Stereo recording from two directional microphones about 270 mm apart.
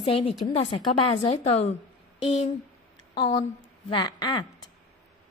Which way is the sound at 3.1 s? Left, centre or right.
Centre.